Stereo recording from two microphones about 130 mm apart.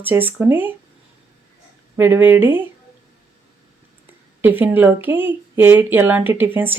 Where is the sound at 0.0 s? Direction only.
15° right (ahead or behind).